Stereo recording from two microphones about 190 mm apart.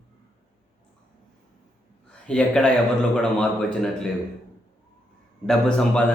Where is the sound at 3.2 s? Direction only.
5° left (ahead or behind).